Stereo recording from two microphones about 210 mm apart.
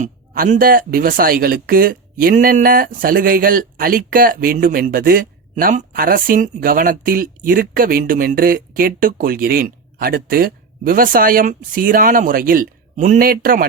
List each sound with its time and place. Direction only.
0.0 s speech: 35° right (ahead or behind)